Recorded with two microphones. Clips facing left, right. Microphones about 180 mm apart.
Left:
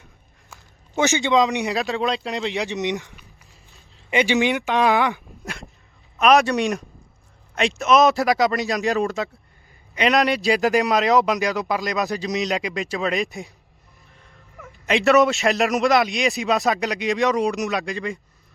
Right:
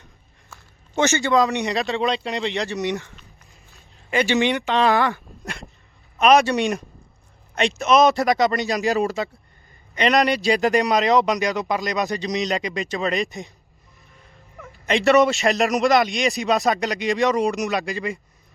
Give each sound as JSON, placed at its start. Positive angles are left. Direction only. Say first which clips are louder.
{"t": 1.0, "sound": "speech", "louder": "even", "side_deg": 0}
{"t": 2.6, "sound": "speech", "louder": "even", "side_deg": 20}
{"t": 4.4, "sound": "speech", "louder": "even", "side_deg": 5}
{"t": 6.1, "sound": "speech", "louder": "right 1 dB", "side_deg": 0}
{"t": 14.6, "sound": "speech", "louder": "even", "side_deg": 0}